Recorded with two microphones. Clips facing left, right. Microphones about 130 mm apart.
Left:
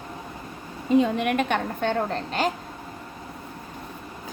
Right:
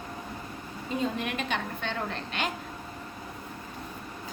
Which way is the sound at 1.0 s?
60° left (ahead or behind).